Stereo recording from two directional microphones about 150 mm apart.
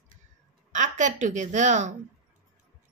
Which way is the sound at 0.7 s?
55° right (ahead or behind).